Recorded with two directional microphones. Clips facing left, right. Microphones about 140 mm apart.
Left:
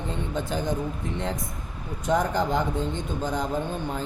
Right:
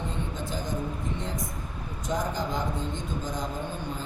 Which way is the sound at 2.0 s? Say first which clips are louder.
Left 6 dB; 65° left (ahead or behind).